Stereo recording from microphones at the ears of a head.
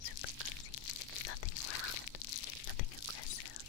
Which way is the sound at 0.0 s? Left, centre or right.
Left.